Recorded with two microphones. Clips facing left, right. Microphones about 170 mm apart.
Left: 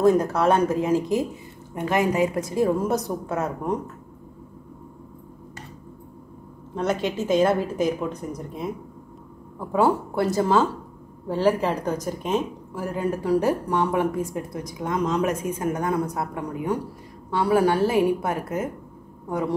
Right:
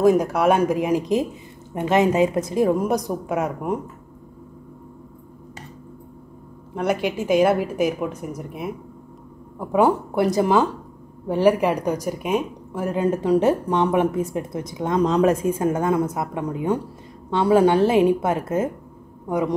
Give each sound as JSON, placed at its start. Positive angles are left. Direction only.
{"t": 0.0, "sound": "speech", "side_deg": -10}
{"t": 6.7, "sound": "speech", "side_deg": -10}